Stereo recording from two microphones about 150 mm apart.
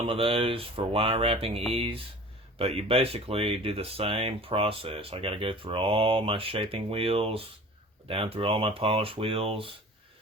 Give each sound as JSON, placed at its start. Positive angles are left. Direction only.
{"t": 0.0, "sound": "speech", "side_deg": -40}